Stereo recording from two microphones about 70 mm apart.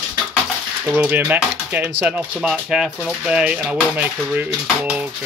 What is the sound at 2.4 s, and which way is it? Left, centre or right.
Speech, centre.